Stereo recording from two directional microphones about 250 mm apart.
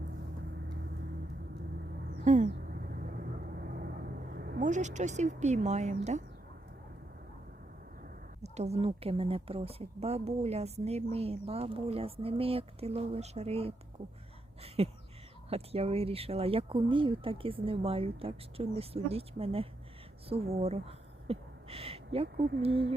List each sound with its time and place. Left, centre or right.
2.2 s a sound: right
2.5 s vehicle: right
8.5 s a woman's voice: right
14.8 s a woman's voice: right